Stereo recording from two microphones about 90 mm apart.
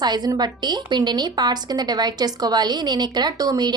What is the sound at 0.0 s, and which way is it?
A woman's voice, 50° right (ahead or behind).